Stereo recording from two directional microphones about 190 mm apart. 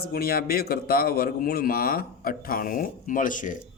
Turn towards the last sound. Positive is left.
turn(degrees=45)  # may be behind; listen again after turning